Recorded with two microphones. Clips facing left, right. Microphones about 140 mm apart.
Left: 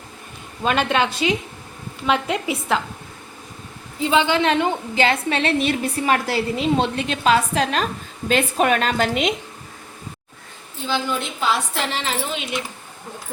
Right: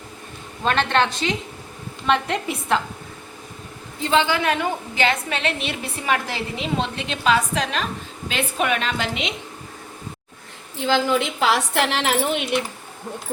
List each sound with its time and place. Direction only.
0.6 s a woman's voice: 5° left (ahead or behind)
4.0 s a woman's voice: 10° left (ahead or behind)
4.3 s a woman's voice: 25° left (ahead or behind); by 9.3 s 45° left (ahead or behind)
10.8 s a woman's voice: 90° right; by 12.5 s 60° right (ahead or behind)